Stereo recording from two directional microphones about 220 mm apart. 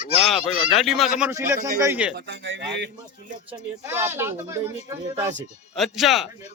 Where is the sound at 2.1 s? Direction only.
55° right (ahead or behind).